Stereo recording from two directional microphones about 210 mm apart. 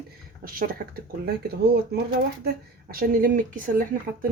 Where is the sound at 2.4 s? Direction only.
45° right (ahead or behind).